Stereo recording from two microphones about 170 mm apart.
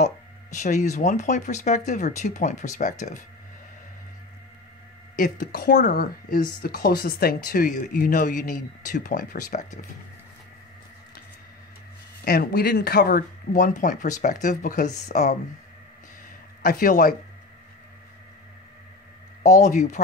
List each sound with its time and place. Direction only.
0.0 s speech: 45° left (ahead or behind)
5.1 s speech: 55° left (ahead or behind)
12.3 s speech: 65° left (ahead or behind); by 15.3 s 45° left (ahead or behind)
16.6 s speech: 55° left (ahead or behind)
19.4 s speech: 45° left (ahead or behind)